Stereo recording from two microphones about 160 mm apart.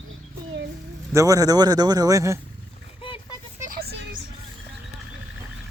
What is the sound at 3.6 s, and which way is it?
Vehicle, 65° right (ahead or behind).